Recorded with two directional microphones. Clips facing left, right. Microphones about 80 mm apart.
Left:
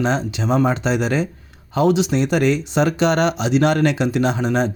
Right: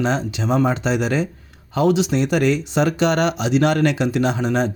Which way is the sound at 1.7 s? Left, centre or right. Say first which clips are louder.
Left 1 dB; left.